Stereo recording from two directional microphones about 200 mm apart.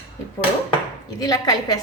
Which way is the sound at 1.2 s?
20° left (ahead or behind).